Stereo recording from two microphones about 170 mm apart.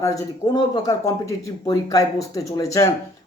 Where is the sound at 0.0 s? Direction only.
20° left (ahead or behind).